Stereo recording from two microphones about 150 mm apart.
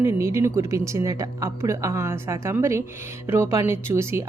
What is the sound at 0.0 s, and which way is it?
Speech, 20° right (ahead or behind).